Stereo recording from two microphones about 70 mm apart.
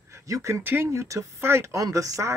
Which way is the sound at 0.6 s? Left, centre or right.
Right.